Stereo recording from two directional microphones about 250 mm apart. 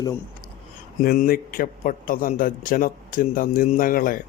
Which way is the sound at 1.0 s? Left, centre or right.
Left.